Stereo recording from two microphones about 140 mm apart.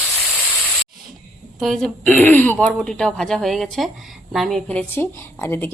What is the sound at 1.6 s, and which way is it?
Speech, centre (ahead or behind).